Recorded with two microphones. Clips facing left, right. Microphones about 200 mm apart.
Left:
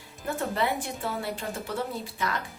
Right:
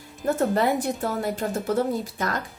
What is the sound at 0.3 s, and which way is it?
A woman's voice, 45° right (ahead or behind).